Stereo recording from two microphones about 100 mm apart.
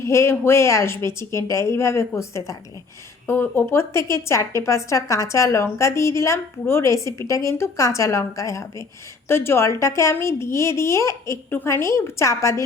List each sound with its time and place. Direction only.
0.0 s speech: 25° left (ahead or behind)